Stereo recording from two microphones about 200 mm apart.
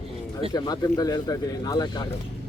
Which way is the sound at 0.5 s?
20° left (ahead or behind).